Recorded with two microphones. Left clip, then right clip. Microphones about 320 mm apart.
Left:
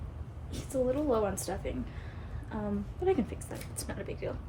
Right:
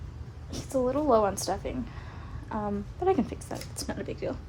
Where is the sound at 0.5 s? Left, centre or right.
Centre.